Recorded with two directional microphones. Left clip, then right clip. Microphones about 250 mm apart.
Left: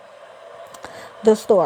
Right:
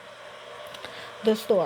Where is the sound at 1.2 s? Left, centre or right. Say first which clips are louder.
Left 8 dB; left.